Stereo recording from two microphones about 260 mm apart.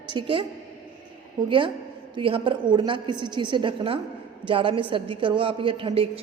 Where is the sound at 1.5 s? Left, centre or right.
Centre.